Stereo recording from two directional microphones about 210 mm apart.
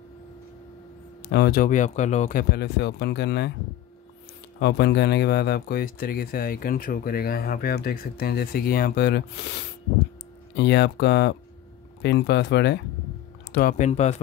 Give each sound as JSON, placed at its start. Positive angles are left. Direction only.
{"t": 1.3, "sound": "speech", "side_deg": 50}
{"t": 4.6, "sound": "speech", "side_deg": 55}